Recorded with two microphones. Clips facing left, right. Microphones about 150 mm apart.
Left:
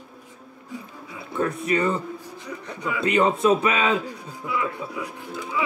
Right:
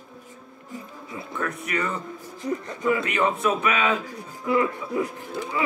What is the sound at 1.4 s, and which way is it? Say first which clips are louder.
Speech: left 6 dB; 30° left (ahead or behind).